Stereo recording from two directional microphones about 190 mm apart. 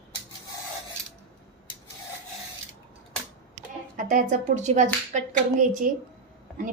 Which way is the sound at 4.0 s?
45° right (ahead or behind).